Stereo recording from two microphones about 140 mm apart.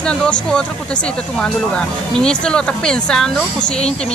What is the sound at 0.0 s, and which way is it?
Speech, 5° left (ahead or behind).